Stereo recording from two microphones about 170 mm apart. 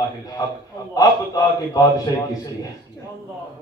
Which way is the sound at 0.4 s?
20° left (ahead or behind).